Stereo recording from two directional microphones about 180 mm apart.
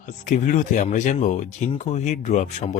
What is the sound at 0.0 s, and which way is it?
Speech, 45° left (ahead or behind).